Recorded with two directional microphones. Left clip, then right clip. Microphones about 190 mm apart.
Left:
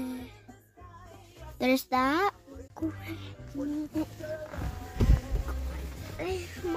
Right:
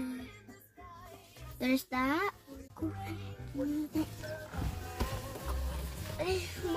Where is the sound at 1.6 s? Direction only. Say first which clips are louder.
Left 7 dB; 30° left (ahead or behind).